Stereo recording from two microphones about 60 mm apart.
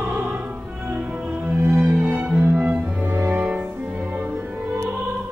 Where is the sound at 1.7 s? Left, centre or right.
Centre; by 3.4 s right.